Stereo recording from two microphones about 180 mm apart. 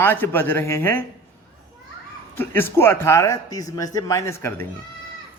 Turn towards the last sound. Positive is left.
turn(degrees=15)  # may be behind; listen again after turning